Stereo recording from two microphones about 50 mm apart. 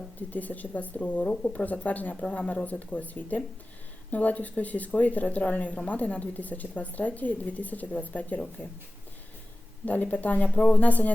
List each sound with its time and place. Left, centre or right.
0.2 s a woman's voice: left; by 1.6 s centre
1.6 s a woman's voice: left
9.8 s a woman's voice: left